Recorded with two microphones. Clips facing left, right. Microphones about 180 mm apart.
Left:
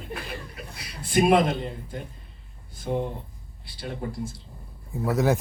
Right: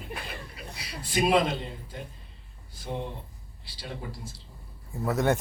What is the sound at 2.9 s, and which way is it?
Speech, 50° left (ahead or behind).